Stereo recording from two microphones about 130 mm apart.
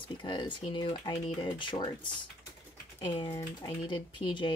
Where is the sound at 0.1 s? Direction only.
40° left (ahead or behind).